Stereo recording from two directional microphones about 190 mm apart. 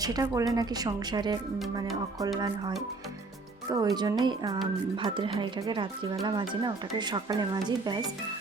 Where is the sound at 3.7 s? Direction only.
15° right (ahead or behind).